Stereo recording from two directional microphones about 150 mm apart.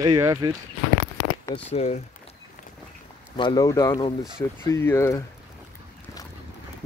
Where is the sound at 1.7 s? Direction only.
50° left (ahead or behind).